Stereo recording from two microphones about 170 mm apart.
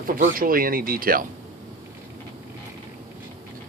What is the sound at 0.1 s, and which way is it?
Speech, 55° right (ahead or behind).